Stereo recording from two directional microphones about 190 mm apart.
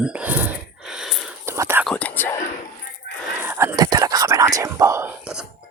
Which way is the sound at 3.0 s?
60° left (ahead or behind).